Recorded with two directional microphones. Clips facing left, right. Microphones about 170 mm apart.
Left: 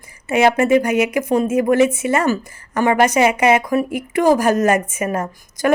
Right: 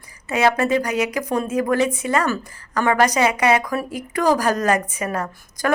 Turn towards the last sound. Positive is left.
turn(degrees=20)  # may be behind; listen again after turning